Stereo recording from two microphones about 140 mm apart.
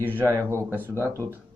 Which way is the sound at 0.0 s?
15° right (ahead or behind).